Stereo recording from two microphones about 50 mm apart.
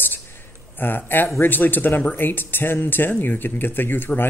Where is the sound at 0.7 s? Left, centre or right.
Left.